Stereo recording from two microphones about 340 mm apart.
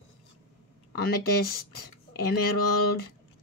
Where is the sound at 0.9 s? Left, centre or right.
Left.